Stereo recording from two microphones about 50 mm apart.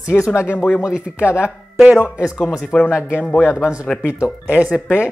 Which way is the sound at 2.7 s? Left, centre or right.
Centre.